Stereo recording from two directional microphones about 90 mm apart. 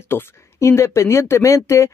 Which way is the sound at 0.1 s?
30° left (ahead or behind).